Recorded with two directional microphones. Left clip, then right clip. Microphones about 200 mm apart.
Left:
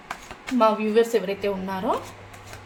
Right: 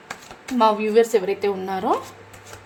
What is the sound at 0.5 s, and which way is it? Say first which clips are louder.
Speech: right 3 dB; 45° right (ahead or behind).